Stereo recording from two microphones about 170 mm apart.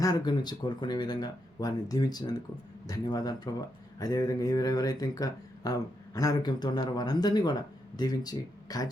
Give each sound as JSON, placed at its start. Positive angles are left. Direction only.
{"t": 0.0, "sound": "speech", "side_deg": 20}